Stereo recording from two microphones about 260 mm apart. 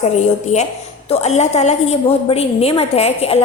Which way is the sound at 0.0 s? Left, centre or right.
Left.